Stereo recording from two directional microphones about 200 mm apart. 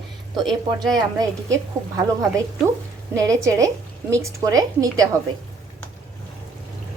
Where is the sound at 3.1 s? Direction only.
15° right (ahead or behind).